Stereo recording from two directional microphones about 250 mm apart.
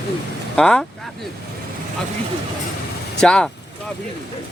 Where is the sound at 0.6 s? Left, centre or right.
Centre.